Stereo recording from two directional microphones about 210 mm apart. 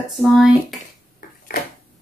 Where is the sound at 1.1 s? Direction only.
45° left (ahead or behind).